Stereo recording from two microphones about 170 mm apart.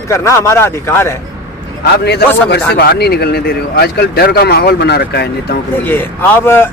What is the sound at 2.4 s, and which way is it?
Speech, 70° left (ahead or behind).